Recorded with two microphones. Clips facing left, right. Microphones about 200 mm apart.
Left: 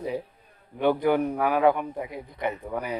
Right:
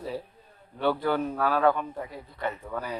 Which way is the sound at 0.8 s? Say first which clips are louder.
Left 4 dB; 15° left (ahead or behind).